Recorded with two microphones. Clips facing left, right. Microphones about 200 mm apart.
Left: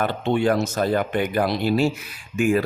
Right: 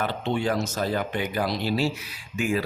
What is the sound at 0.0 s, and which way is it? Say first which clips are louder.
Speech: left 5 dB; 55° left (ahead or behind).